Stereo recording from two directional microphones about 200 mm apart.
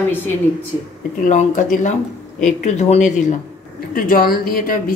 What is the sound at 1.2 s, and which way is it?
Speech, 40° left (ahead or behind).